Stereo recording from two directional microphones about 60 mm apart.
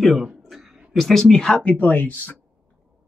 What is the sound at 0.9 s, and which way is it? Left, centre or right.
Speech, centre.